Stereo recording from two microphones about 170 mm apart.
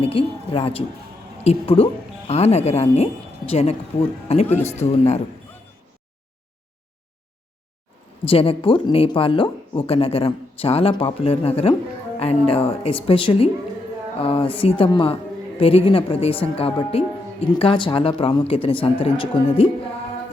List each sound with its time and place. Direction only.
0.0 s speech: 35° left (ahead or behind)
8.3 s speech: 35° left (ahead or behind)